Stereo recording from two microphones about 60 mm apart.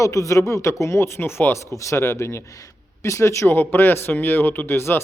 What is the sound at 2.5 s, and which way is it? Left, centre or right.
Speech, left.